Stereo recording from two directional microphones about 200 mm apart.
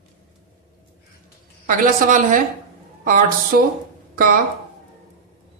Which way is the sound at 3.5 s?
45° right (ahead or behind).